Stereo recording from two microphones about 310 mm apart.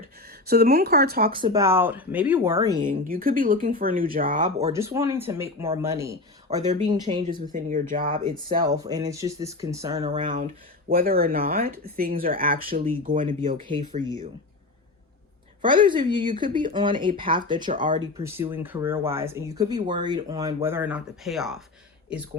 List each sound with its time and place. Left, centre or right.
0.4 s speech: right
1.4 s speech: centre
4.7 s speech: centre
7.5 s speech: right
8.4 s speech: centre
15.6 s speech: centre
18.2 s speech: centre